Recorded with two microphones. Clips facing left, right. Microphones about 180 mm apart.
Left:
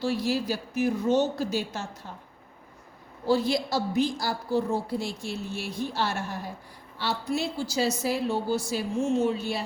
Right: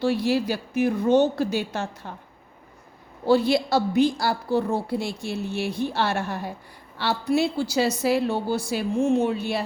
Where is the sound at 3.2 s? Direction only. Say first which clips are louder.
Right 5 dB; 65° right (ahead or behind).